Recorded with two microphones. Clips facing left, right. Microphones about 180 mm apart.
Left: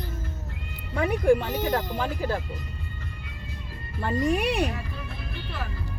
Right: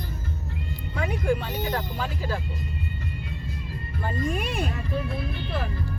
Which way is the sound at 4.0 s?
75° left (ahead or behind).